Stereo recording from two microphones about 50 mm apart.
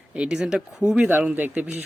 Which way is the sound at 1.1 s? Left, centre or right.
Right.